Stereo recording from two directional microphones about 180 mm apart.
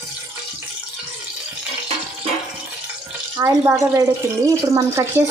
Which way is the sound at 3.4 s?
15° right (ahead or behind).